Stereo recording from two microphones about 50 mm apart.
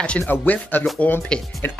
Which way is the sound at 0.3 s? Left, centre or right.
Left.